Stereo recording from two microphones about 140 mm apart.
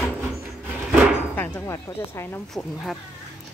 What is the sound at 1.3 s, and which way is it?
Speech, 15° left (ahead or behind).